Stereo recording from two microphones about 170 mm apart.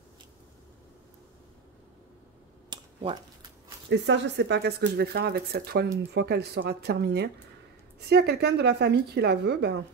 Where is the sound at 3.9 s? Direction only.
90° right.